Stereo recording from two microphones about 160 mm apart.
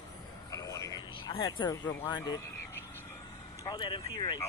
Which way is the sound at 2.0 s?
25° left (ahead or behind).